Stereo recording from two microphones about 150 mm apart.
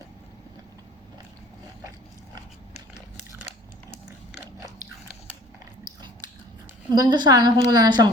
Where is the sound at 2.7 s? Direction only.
45° left (ahead or behind).